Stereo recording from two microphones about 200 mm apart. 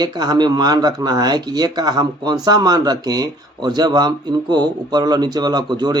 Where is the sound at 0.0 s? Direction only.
20° right (ahead or behind).